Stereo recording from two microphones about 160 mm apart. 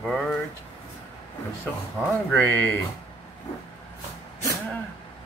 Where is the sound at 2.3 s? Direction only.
10° left (ahead or behind).